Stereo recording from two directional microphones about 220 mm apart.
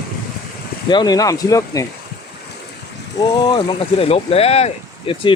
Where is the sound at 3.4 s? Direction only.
20° left (ahead or behind).